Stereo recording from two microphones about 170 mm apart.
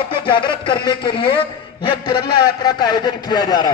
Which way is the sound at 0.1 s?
30° left (ahead or behind).